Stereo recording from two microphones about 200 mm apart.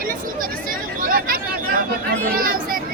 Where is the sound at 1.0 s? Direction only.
45° right (ahead or behind).